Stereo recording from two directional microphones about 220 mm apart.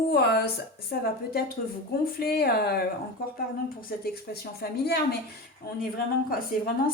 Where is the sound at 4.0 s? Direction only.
45° left (ahead or behind).